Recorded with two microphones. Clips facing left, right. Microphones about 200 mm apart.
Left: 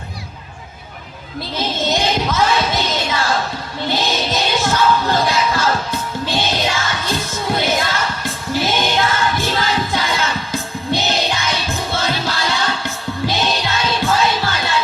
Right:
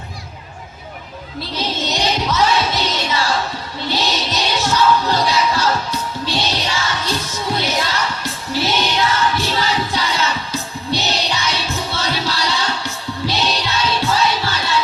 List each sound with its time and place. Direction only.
1.5 s music: 50° left (ahead or behind)